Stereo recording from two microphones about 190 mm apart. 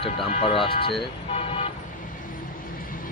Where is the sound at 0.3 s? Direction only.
30° left (ahead or behind).